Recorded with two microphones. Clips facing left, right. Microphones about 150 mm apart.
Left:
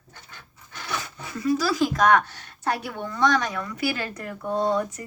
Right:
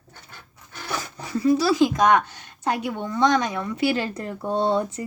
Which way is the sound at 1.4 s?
25° right (ahead or behind).